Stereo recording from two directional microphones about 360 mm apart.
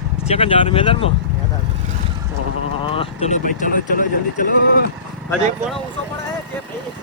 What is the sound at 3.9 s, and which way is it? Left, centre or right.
Speech, left.